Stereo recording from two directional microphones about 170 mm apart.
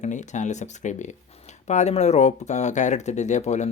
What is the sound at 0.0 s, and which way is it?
Speech, 45° left (ahead or behind).